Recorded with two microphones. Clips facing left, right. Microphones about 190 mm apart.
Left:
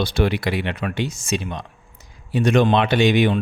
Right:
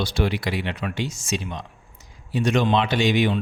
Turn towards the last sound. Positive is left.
turn(degrees=60)  # may be behind; listen again after turning